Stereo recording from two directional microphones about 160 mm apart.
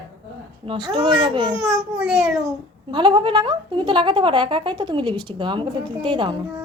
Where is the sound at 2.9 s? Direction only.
30° right (ahead or behind).